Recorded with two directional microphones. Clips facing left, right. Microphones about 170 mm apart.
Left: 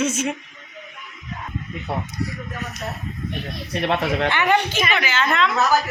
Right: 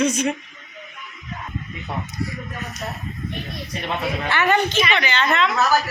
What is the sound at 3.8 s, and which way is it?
Speech, 75° left (ahead or behind).